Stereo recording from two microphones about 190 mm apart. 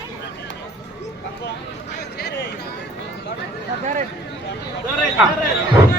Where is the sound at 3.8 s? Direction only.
40° right (ahead or behind).